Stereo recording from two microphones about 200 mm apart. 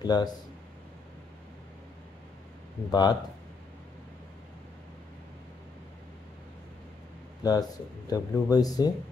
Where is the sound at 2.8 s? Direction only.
20° left (ahead or behind).